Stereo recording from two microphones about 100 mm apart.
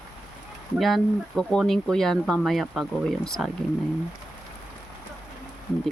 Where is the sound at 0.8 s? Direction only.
Centre (ahead or behind).